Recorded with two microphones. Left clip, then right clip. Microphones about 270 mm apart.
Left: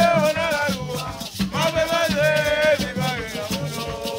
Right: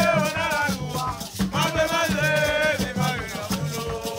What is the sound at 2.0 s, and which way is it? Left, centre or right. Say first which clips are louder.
Music: left 3 dB; centre.